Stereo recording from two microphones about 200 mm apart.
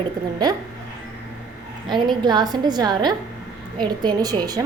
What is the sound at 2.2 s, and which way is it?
A woman's voice, 20° right (ahead or behind).